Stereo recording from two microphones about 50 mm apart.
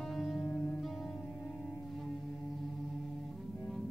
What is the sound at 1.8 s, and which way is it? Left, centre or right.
Music, centre.